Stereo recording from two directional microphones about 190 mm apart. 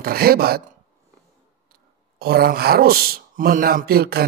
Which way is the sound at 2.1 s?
55° right (ahead or behind).